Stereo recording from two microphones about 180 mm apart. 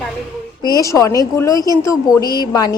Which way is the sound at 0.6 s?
20° left (ahead or behind).